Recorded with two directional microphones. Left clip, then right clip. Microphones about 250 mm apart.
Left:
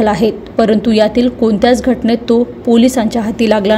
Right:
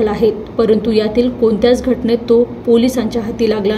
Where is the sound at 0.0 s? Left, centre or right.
Left.